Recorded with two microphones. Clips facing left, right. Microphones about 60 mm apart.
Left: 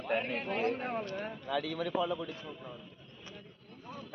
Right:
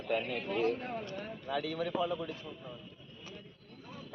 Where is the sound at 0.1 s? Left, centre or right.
Left.